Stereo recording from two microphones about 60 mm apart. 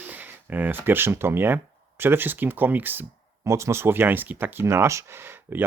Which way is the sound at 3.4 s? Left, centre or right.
Right.